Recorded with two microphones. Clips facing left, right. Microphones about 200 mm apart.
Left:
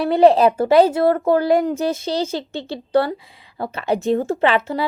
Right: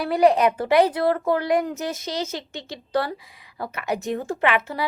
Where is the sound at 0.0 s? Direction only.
25° left (ahead or behind).